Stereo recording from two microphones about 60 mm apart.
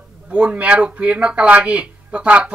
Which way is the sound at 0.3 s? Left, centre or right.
Right.